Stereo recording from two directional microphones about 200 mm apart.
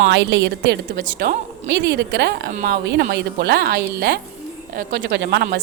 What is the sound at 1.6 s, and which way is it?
A woman's voice, 55° right (ahead or behind).